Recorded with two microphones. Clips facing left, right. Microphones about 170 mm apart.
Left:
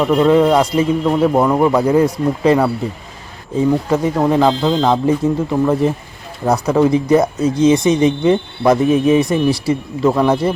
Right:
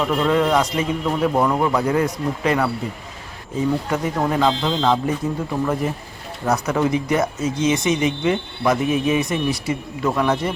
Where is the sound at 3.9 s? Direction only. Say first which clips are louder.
Left 6 dB; 25° left (ahead or behind).